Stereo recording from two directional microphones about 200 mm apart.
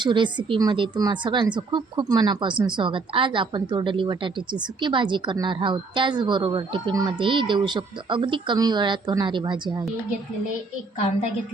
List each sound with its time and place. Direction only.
0.0 s a woman's voice: 25° right (ahead or behind)